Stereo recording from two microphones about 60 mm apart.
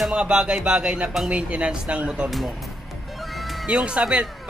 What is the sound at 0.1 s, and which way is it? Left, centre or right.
Speech, centre.